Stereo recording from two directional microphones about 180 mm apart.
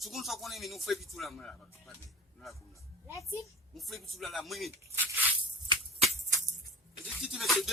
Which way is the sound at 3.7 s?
Centre (ahead or behind).